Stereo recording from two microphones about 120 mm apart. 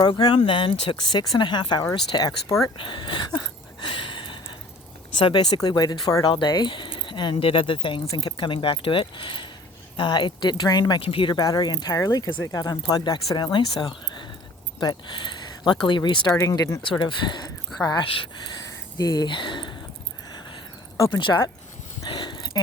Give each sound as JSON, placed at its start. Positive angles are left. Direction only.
{"t": 0.0, "sound": "speech", "side_deg": 40}
{"t": 2.7, "sound": "a sound", "side_deg": 40}
{"t": 5.1, "sound": "speech", "side_deg": 40}
{"t": 11.0, "sound": "speech", "side_deg": 45}
{"t": 21.2, "sound": "speech", "side_deg": 40}
{"t": 22.2, "sound": "a sound", "side_deg": 35}